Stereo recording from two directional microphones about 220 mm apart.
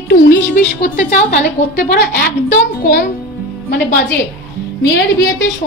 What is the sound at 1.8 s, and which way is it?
A woman's voice, 50° left (ahead or behind).